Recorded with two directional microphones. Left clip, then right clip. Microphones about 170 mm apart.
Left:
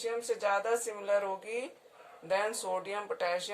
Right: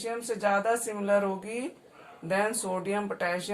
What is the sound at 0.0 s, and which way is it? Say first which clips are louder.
Speech: right 3 dB; 60° left (ahead or behind).